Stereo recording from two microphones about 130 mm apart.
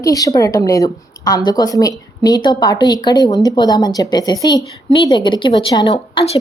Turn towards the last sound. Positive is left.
turn(degrees=50)  # may be behind; listen again after turning